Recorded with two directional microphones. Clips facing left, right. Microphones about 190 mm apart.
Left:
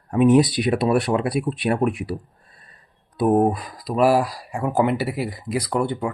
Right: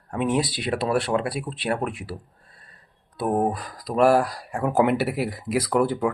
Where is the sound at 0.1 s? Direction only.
20° left (ahead or behind).